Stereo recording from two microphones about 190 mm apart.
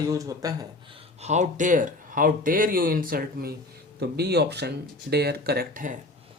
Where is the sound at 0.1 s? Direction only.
15° right (ahead or behind).